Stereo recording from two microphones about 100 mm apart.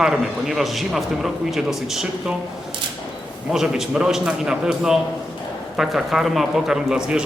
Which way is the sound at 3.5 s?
5° right (ahead or behind).